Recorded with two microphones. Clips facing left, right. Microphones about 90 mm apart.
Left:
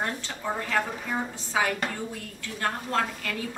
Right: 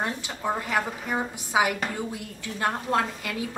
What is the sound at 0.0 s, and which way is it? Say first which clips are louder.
A woman's voice: right 2 dB; 15° right (ahead or behind).